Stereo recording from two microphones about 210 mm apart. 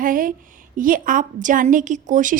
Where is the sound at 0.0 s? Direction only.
40° right (ahead or behind).